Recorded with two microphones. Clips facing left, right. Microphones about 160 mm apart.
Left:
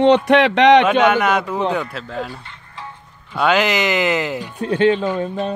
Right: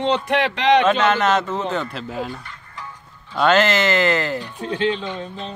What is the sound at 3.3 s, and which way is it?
Speech, 10° left (ahead or behind).